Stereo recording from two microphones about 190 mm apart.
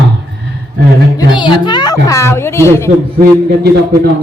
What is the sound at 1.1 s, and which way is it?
A woman's voice, 25° left (ahead or behind).